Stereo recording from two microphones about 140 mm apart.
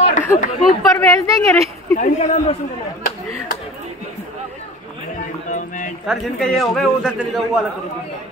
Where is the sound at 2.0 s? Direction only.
55° left (ahead or behind).